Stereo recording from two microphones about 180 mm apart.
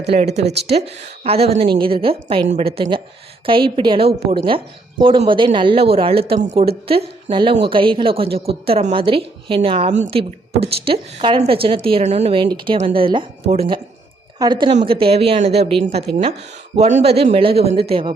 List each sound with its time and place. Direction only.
0.1 s a woman's voice: 35° right (ahead or behind)
14.7 s a woman's voice: 35° right (ahead or behind)